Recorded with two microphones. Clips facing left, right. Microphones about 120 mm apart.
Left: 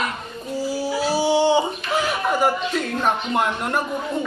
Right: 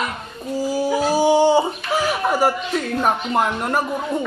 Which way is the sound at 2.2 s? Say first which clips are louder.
Right 1 dB; 5° right (ahead or behind).